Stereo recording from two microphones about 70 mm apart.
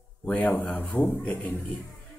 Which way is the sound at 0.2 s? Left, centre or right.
Left.